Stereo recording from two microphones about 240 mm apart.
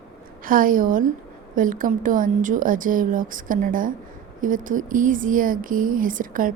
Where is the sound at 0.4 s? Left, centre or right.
Right.